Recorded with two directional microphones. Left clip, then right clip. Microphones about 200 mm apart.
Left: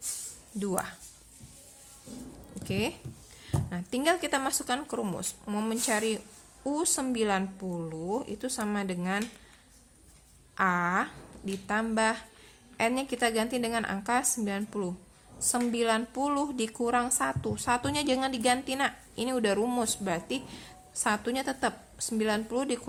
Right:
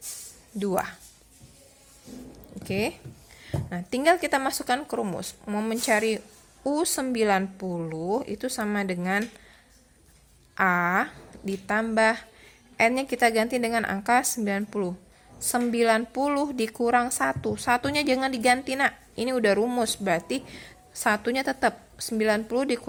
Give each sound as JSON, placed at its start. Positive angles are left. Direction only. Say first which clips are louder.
{"t": 0.6, "sound": "a woman's voice", "louder": "right 6 dB", "side_deg": -10}
{"t": 2.6, "sound": "a woman's voice", "louder": "right 4 dB", "side_deg": -10}
{"t": 10.5, "sound": "a woman's voice", "louder": "right 4 dB", "side_deg": -10}